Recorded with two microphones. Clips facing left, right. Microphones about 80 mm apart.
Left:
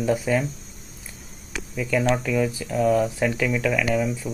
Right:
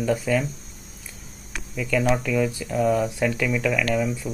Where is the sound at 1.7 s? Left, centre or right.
Centre.